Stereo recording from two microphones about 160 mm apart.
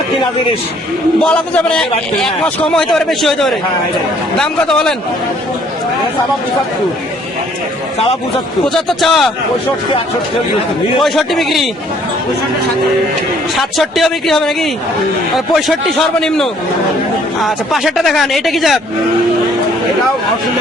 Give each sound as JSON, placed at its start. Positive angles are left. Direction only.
{"t": 1.2, "sound": "a man's voice", "side_deg": 5}
{"t": 8.6, "sound": "a man's voice", "side_deg": 0}
{"t": 11.0, "sound": "a man's voice", "side_deg": 0}
{"t": 13.6, "sound": "a man's voice", "side_deg": 0}